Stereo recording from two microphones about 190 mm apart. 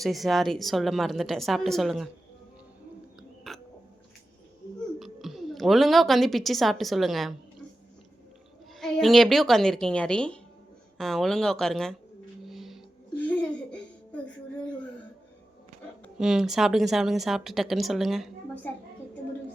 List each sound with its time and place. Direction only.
0.0 s speech: centre (ahead or behind)
3.2 s hiccup: centre (ahead or behind)
4.9 s a woman's voice: centre (ahead or behind)
8.8 s speech: centre (ahead or behind)
12.5 s music: centre (ahead or behind)
13.1 s a sound: 5° left (ahead or behind)
16.1 s speech: 5° right (ahead or behind)